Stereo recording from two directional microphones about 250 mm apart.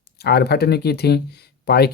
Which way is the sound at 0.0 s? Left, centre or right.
Left.